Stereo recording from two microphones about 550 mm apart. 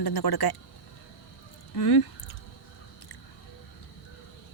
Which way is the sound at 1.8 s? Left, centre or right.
Left.